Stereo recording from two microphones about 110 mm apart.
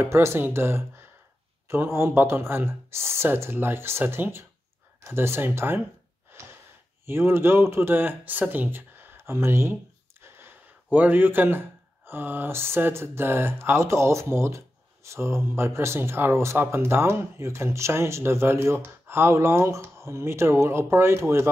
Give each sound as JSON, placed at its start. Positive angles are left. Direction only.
{"t": 0.0, "sound": "speech", "side_deg": -25}
{"t": 7.1, "sound": "speech", "side_deg": -20}